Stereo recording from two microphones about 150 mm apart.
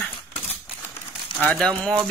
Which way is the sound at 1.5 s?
10° left (ahead or behind).